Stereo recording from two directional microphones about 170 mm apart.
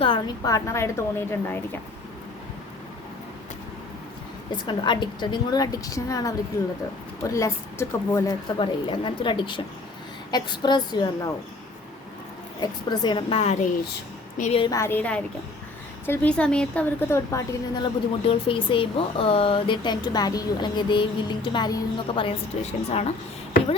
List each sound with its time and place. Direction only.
0.0 s a woman's voice: 25° left (ahead or behind)
4.5 s a woman's voice: 25° left (ahead or behind)
8.5 s a woman's voice: 30° left (ahead or behind)
12.6 s a woman's voice: 25° left (ahead or behind); by 14.6 s 45° left (ahead or behind)
14.6 s a woman's voice: 20° left (ahead or behind)